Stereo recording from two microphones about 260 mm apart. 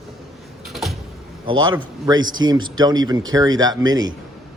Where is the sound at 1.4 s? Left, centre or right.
Centre.